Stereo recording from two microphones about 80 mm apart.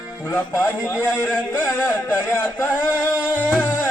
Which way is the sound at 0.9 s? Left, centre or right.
Left.